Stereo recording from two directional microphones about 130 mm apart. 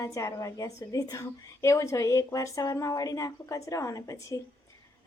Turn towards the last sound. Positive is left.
turn(degrees=25)  # may be behind; listen again after turning